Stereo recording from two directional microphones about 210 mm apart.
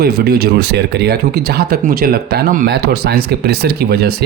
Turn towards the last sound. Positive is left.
turn(degrees=-50)  # may be behind; listen again after turning